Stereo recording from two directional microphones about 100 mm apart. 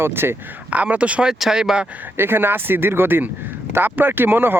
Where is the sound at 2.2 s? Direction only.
20° right (ahead or behind).